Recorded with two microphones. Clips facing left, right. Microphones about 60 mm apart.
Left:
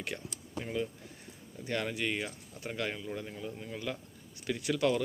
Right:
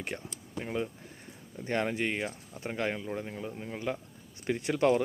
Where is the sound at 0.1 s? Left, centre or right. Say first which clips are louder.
Right 1 dB; right.